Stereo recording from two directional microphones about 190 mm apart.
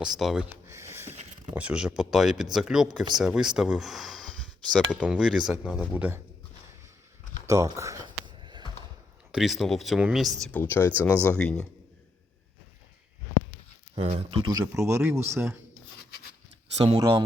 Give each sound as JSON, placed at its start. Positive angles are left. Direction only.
{"t": 0.0, "sound": "speech", "side_deg": 0}
{"t": 0.7, "sound": "a sound", "side_deg": -15}
{"t": 1.5, "sound": "speech", "side_deg": -5}
{"t": 7.4, "sound": "a sound", "side_deg": -15}
{"t": 9.3, "sound": "speech", "side_deg": 0}
{"t": 10.4, "sound": "speech", "side_deg": 10}
{"t": 13.9, "sound": "speech", "side_deg": -30}
{"t": 14.6, "sound": "speech", "side_deg": -15}
{"t": 17.0, "sound": "speech", "side_deg": -25}